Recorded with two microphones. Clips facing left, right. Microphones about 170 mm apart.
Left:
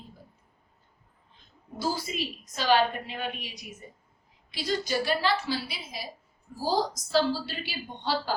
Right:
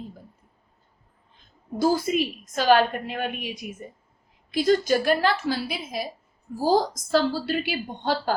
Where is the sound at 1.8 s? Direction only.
50° right (ahead or behind).